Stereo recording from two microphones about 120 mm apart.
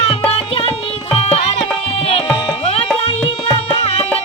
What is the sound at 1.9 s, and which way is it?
Tabla, 55° left (ahead or behind).